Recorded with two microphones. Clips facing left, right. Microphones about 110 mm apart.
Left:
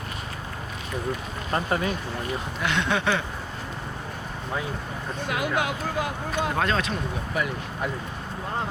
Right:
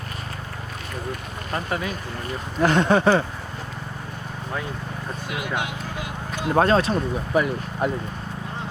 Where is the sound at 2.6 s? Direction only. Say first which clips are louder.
Right 9 dB; 40° right (ahead or behind).